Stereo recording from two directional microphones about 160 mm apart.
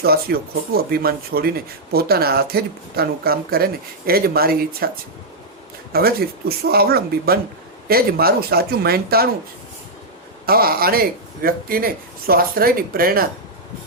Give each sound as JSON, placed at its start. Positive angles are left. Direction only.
{"t": 0.0, "sound": "speech", "side_deg": -75}
{"t": 5.9, "sound": "speech", "side_deg": -70}
{"t": 10.4, "sound": "speech", "side_deg": -70}